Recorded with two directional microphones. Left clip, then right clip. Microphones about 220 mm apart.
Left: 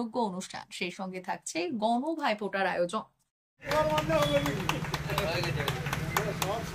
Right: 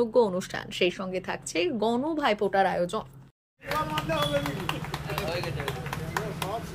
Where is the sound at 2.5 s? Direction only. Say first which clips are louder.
Right 4 dB; 30° right (ahead or behind).